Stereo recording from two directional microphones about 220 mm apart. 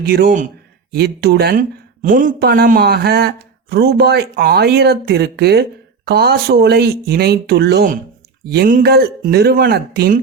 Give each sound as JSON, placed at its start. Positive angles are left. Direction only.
{"t": 0.1, "sound": "speech", "side_deg": -45}